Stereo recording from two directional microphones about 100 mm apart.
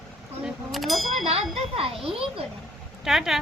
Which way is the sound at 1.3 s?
70° right (ahead or behind).